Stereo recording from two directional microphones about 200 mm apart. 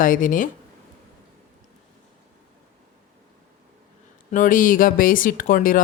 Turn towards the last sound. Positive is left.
turn(degrees=45)  # may be behind; listen again after turning